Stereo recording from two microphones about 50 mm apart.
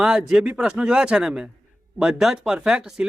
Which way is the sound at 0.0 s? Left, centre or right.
Centre.